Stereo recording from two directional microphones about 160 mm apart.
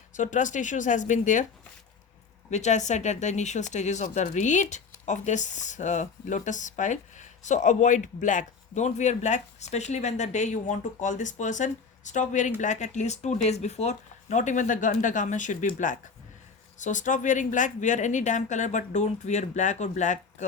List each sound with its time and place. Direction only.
0.1 s speech: 50° left (ahead or behind)
2.5 s speech: 45° left (ahead or behind)